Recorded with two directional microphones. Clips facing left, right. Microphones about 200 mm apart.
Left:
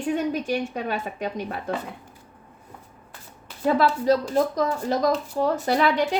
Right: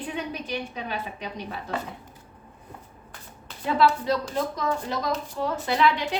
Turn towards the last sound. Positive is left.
turn(degrees=45)  # may be behind; listen again after turning